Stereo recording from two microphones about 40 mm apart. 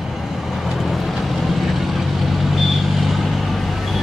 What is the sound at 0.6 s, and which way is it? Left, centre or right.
Vehicle, centre.